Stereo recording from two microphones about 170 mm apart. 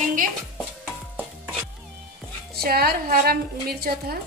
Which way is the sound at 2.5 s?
65° right (ahead or behind).